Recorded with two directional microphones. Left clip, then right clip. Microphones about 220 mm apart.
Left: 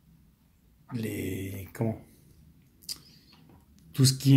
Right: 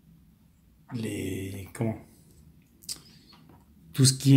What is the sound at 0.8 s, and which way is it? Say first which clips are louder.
Speech: right 1 dB; 5° left (ahead or behind).